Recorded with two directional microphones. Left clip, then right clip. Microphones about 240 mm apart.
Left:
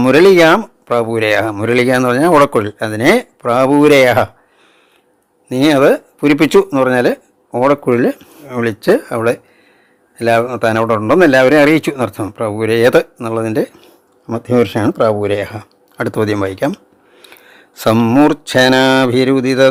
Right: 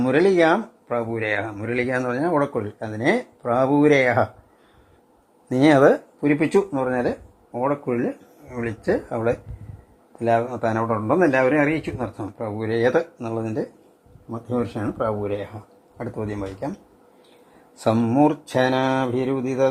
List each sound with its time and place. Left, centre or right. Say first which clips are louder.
0.0 s speech: left 10 dB; left
5.5 s speech: left 5 dB; centre
6.1 s speech: left 9 dB; left
14.3 s speech: left 13 dB; left
17.7 s speech: left 8 dB; left